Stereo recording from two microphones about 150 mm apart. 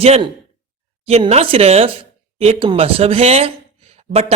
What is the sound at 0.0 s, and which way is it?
Speech, 40° right (ahead or behind).